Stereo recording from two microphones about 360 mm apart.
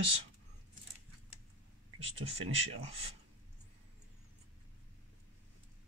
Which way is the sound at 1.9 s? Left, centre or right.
Centre.